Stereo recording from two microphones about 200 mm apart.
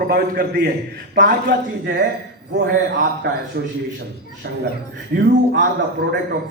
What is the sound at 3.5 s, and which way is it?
A man's voice, 50° right (ahead or behind).